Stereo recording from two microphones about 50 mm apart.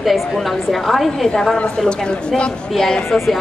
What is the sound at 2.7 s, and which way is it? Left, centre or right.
Speech, centre.